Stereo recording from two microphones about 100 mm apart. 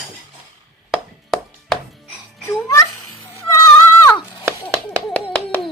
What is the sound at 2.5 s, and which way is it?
Music, 30° left (ahead or behind).